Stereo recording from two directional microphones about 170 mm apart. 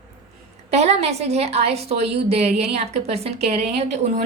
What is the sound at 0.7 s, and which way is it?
A woman's voice, 40° right (ahead or behind).